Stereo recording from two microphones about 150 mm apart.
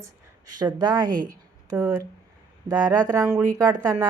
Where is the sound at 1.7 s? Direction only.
20° right (ahead or behind).